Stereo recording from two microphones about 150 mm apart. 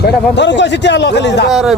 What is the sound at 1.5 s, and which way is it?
Speech, centre (ahead or behind).